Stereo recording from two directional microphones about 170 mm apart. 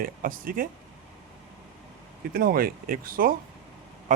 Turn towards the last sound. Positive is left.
turn(degrees=-55)  # may be behind; listen again after turning